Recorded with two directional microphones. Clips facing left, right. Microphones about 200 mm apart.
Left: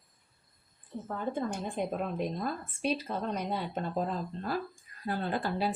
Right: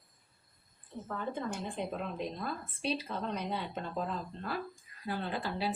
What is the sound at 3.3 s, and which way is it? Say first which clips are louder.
A woman's voice: left 3 dB; 45° left (ahead or behind).